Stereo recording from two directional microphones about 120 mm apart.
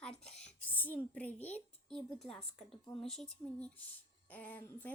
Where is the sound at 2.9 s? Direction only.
5° left (ahead or behind).